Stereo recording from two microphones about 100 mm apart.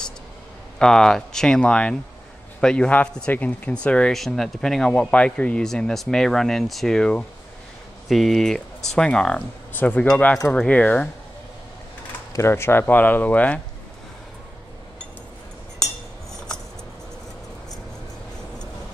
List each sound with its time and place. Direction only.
0.7 s speech: 5° left (ahead or behind)
10.3 s speech: 5° left (ahead or behind)
12.3 s speech: 25° left (ahead or behind)